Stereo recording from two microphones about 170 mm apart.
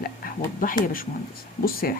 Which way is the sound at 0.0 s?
55° left (ahead or behind).